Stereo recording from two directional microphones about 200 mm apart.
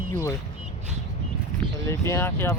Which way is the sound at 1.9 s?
15° left (ahead or behind).